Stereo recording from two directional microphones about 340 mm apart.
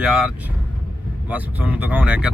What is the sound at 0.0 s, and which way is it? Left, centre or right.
Speech, centre.